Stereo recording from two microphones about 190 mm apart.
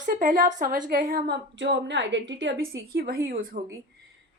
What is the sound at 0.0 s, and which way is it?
A woman's voice, 45° right (ahead or behind).